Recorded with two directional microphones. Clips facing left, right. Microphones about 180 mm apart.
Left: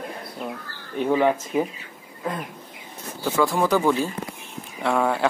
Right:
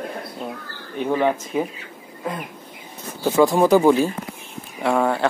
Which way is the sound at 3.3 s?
20° right (ahead or behind).